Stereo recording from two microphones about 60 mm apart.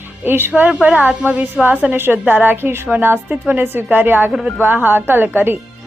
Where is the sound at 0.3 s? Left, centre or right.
Right.